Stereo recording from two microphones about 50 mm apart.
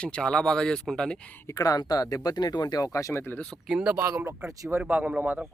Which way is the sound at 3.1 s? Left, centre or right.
Left.